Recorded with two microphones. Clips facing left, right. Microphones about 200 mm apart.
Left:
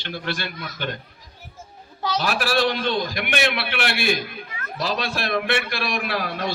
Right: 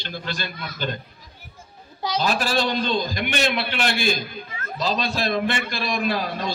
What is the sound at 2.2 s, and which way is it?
A man's voice, 65° left (ahead or behind).